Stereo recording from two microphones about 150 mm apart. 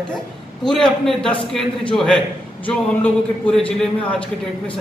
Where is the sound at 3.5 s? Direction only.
10° left (ahead or behind).